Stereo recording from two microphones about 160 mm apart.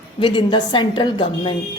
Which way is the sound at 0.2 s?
30° left (ahead or behind).